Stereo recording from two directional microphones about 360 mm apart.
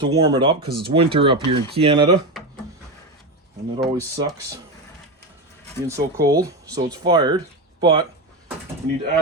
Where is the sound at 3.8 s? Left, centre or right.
Centre.